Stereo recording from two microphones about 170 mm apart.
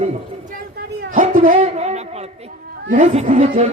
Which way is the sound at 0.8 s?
60° right (ahead or behind).